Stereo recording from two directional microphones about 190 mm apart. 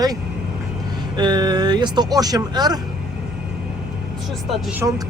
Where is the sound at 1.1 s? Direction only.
25° right (ahead or behind).